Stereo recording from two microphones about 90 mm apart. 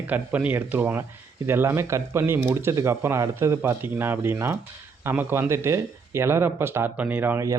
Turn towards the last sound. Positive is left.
turn(degrees=-20)  # may be behind; listen again after turning